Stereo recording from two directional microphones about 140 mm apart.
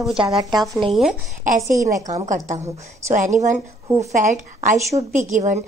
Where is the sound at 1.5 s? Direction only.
70° right (ahead or behind).